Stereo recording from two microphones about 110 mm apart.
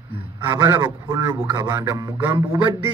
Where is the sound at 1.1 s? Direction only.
30° right (ahead or behind).